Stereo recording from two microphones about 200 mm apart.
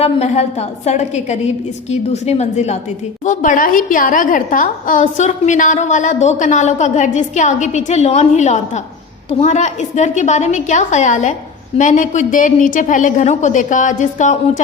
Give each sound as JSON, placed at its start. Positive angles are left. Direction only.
{"t": 0.0, "sound": "a woman's voice", "side_deg": 35}